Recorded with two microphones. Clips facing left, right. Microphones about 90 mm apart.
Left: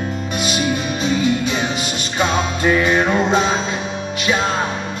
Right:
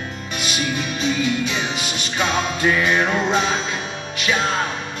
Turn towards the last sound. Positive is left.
turn(degrees=35)  # may be behind; listen again after turning